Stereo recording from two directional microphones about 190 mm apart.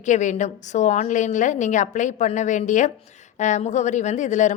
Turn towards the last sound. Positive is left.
turn(degrees=40)  # may be behind; listen again after turning